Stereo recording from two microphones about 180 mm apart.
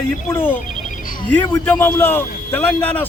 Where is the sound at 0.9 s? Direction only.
50° left (ahead or behind).